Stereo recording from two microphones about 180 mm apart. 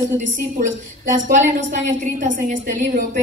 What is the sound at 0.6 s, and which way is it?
Speech, 45° right (ahead or behind).